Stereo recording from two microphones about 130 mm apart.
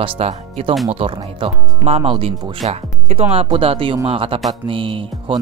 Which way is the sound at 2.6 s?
55° right (ahead or behind).